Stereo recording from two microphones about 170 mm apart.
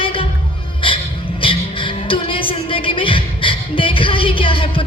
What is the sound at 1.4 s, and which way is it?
A man's voice, 30° left (ahead or behind).